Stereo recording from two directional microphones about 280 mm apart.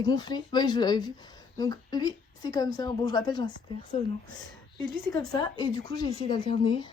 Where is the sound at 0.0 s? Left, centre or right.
Centre.